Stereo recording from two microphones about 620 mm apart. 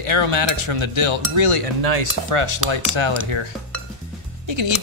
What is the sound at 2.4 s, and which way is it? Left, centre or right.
Speech, right.